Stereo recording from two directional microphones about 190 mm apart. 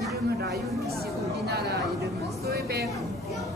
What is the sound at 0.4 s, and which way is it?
Speech, 60° right (ahead or behind).